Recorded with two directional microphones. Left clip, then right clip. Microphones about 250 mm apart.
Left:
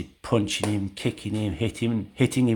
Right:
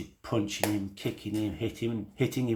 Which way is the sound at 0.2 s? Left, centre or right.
Left.